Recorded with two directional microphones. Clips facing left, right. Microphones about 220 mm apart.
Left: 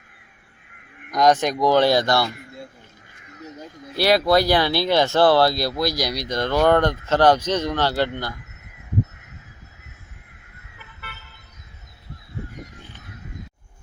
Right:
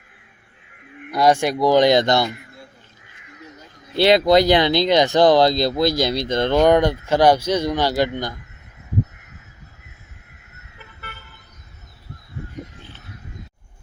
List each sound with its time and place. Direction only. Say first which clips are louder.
1.1 s speech: right 1 dB; 10° right (ahead or behind)
3.9 s speech: right 4 dB; 25° right (ahead or behind)